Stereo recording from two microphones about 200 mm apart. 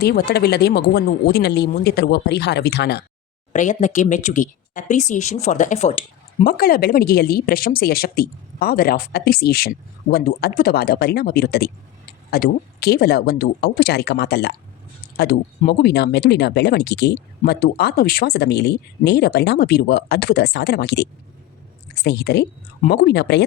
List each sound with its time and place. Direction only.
0.0 s speech: 50° left (ahead or behind)
3.5 s speech: 40° left (ahead or behind)
6.4 s speech: 45° left (ahead or behind)